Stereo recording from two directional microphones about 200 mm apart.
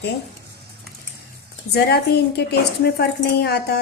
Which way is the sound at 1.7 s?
55° left (ahead or behind).